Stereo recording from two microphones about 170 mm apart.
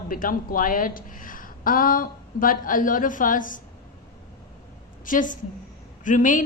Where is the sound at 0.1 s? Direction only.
55° left (ahead or behind).